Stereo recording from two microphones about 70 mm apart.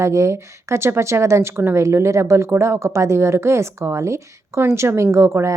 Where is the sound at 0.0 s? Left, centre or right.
Right.